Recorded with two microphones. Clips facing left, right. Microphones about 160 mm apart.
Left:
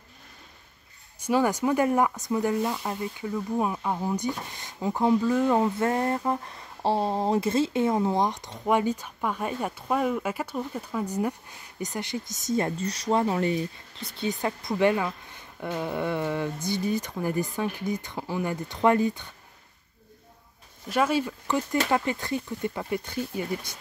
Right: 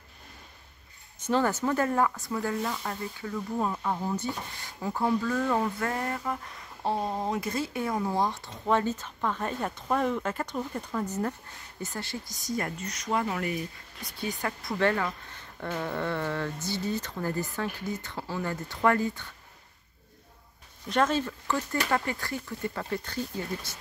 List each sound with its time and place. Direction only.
1.2 s speech: 10° left (ahead or behind)
20.9 s speech: 10° left (ahead or behind)